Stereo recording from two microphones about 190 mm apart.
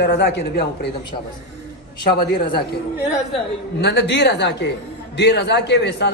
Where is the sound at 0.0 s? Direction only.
65° left (ahead or behind).